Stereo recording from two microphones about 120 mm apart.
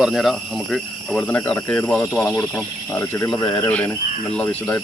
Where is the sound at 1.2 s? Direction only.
15° left (ahead or behind).